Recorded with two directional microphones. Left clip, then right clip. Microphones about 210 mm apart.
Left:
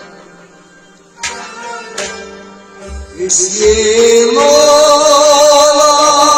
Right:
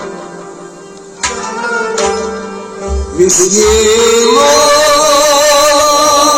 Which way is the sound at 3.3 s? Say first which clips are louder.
Left 1 dB; 55° right (ahead or behind).